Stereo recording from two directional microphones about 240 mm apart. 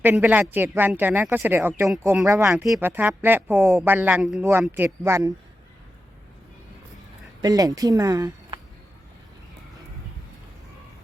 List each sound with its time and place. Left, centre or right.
0.0 s speech: centre
7.4 s speech: centre